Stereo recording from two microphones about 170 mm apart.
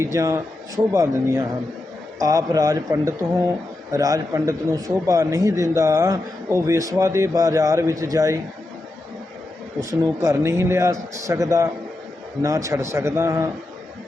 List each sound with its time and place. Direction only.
0.0 s a man's voice: 20° right (ahead or behind)
9.9 s a man's voice: 20° right (ahead or behind)